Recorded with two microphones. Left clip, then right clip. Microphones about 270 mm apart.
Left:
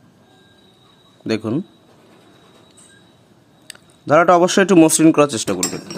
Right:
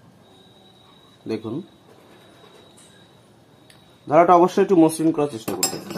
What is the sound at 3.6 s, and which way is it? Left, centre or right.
Speech, left.